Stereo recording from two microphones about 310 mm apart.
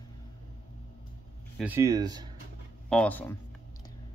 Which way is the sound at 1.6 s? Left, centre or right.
Centre.